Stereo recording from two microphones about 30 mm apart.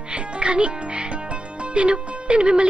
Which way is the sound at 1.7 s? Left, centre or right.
Right.